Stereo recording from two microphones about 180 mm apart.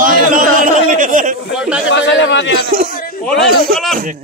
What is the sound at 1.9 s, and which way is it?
Speech, 90° left.